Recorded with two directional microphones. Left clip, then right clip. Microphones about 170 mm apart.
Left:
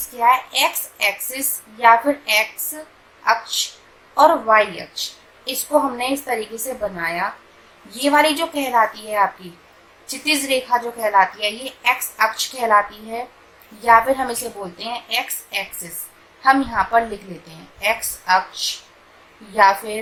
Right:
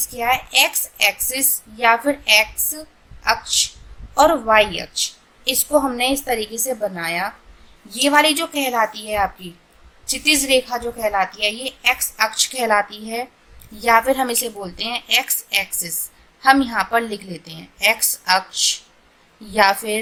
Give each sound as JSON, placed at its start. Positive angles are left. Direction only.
{"t": 0.2, "sound": "a woman's voice", "side_deg": -25}
{"t": 19.5, "sound": "a woman's voice", "side_deg": -35}